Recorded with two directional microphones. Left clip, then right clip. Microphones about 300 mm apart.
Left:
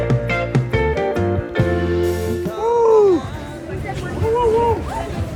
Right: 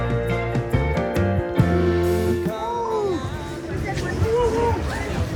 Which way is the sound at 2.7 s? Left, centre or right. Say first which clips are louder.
Left 13 dB; centre.